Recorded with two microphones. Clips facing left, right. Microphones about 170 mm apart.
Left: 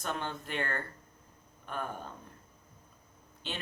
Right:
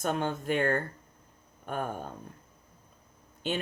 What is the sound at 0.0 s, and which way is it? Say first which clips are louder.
Speech: right 7 dB; 50° right (ahead or behind).